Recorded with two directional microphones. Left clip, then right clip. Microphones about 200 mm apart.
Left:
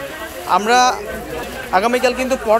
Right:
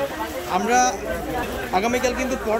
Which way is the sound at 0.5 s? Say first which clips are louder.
Left 6 dB; centre (ahead or behind).